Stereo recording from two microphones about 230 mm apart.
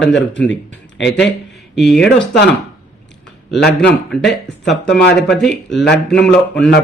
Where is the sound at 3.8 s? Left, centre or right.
Centre.